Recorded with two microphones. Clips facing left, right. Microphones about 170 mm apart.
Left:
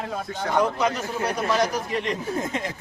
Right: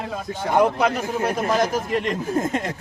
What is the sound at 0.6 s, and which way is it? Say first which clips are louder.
Speech: right 4 dB; 55° right (ahead or behind).